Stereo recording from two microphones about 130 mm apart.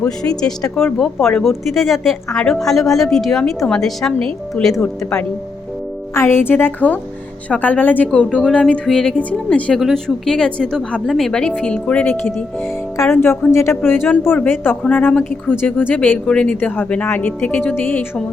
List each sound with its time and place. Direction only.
0.0 s a woman's voice: 5° left (ahead or behind)
6.1 s a woman's voice: 20° left (ahead or behind)